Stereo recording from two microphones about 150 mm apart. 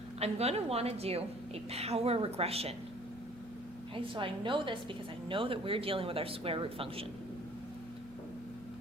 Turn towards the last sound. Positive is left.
turn(degrees=-40)  # may be behind; listen again after turning